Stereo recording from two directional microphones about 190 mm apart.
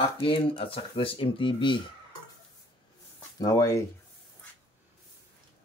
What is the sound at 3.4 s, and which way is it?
Speech, 20° left (ahead or behind).